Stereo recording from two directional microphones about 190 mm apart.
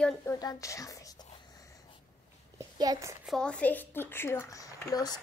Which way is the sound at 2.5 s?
20° right (ahead or behind).